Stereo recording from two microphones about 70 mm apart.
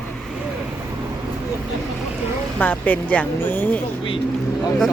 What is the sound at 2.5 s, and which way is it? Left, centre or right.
Speech, left.